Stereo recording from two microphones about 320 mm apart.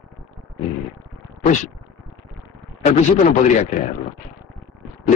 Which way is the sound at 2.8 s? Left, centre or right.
Left.